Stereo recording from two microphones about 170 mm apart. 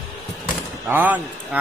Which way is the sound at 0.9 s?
10° right (ahead or behind).